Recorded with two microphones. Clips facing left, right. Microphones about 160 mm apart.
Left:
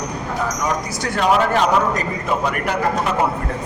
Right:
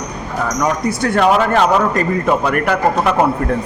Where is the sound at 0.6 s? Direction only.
60° right (ahead or behind).